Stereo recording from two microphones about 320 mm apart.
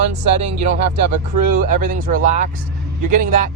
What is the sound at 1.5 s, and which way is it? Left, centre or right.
Speech, right.